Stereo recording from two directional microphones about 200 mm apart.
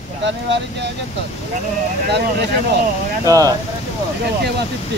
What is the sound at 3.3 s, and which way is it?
Speech, 20° right (ahead or behind).